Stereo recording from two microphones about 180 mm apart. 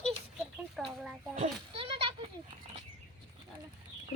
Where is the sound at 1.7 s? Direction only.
30° right (ahead or behind).